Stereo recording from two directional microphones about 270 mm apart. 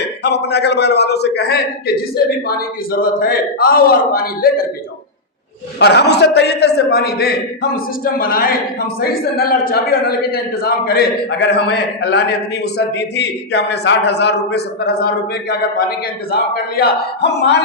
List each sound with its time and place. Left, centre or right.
0.2 s a man's voice: left
5.8 s a man's voice: left